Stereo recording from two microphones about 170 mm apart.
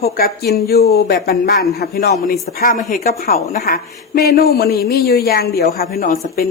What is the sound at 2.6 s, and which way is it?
A woman's voice, 55° left (ahead or behind).